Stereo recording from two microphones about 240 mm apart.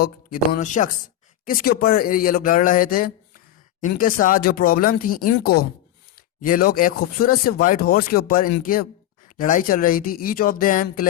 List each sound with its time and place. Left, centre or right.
0.0 s speech: left